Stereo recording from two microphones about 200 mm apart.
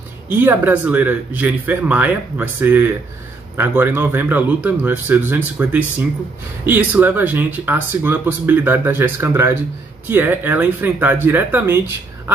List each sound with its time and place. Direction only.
0.3 s speech: 10° right (ahead or behind)